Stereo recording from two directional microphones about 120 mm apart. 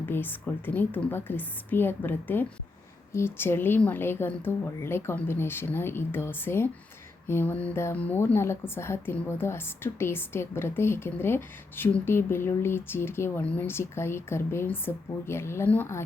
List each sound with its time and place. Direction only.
0.0 s a woman's voice: 15° left (ahead or behind)